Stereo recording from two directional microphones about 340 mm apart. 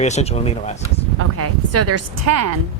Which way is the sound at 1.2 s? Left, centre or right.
Right.